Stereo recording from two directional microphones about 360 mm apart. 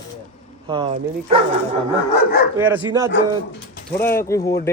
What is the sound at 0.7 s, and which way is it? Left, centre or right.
Speech, centre.